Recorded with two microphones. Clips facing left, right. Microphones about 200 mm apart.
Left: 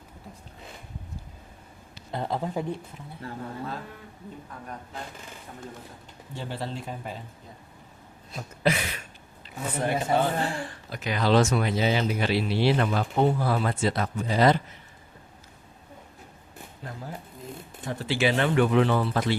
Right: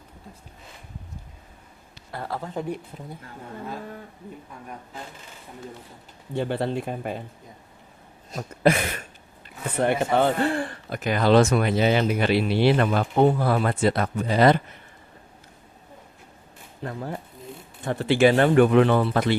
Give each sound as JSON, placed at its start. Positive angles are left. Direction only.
{"t": 2.1, "sound": "speech", "side_deg": 20}
{"t": 2.9, "sound": "speech", "side_deg": -35}
{"t": 6.3, "sound": "a man's voice", "side_deg": -60}
{"t": 8.3, "sound": "a sound", "side_deg": -50}
{"t": 9.8, "sound": "a man's voice", "side_deg": -60}
{"t": 16.8, "sound": "a man's voice", "side_deg": -60}